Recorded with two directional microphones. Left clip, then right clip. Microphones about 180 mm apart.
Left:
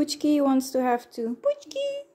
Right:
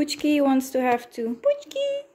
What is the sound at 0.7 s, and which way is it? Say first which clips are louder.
Speech: right 2 dB; 10° left (ahead or behind).